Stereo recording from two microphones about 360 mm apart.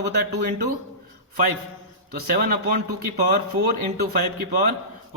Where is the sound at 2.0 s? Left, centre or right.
Right.